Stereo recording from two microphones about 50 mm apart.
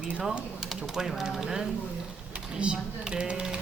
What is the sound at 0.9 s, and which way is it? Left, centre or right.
Speech, centre.